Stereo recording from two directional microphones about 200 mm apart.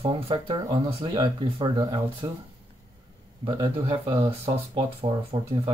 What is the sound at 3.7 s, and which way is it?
Speech, 25° right (ahead or behind).